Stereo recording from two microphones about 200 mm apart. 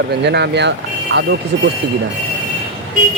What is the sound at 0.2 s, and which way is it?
Speech, 55° right (ahead or behind).